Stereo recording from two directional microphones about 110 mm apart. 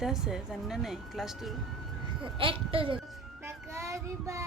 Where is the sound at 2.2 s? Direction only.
55° right (ahead or behind).